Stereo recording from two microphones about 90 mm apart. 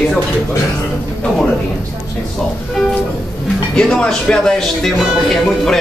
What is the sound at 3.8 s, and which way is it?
Speech, 5° left (ahead or behind).